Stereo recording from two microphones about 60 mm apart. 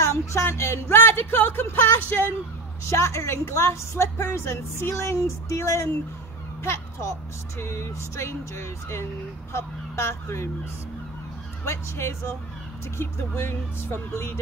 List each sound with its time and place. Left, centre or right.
0.0 s speech: left
2.9 s a woman's voice: left
6.6 s a sound: left
7.5 s a woman's voice: left
11.6 s a woman's voice: left
12.9 s a woman's voice: left